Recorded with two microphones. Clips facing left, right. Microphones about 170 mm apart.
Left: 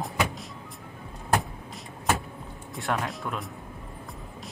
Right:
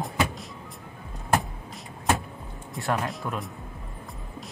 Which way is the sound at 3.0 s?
Centre (ahead or behind).